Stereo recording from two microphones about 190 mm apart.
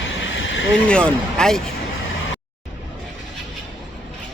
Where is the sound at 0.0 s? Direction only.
85° left.